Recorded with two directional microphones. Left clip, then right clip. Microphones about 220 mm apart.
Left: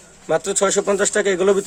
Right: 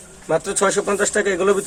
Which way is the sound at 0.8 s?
55° left (ahead or behind).